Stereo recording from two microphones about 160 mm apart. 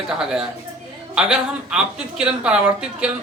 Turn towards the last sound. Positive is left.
turn(degrees=-5)  # may be behind; listen again after turning